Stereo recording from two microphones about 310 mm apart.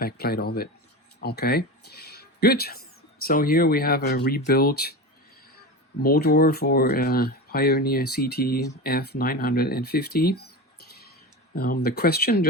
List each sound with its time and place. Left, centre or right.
0.0 s speech: left
6.0 s speech: left